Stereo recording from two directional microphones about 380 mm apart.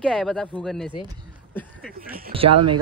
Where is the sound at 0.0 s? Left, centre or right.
Centre.